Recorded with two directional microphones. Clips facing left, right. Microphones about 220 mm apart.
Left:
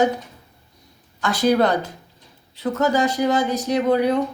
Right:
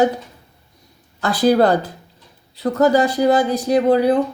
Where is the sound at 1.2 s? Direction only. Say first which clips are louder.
Right 3 dB; 35° right (ahead or behind).